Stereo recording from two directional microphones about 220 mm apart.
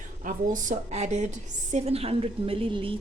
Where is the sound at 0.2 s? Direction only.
35° right (ahead or behind).